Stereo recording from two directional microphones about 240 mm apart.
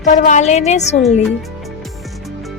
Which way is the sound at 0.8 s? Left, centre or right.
Left.